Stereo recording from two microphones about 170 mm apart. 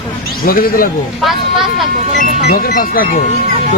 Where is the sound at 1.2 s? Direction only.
Centre (ahead or behind).